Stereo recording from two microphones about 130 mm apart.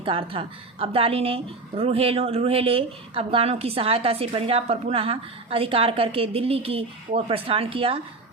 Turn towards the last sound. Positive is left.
turn(degrees=-45)  # may be behind; listen again after turning